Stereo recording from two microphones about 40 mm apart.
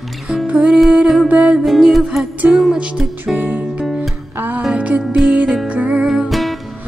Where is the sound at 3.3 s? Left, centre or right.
Right.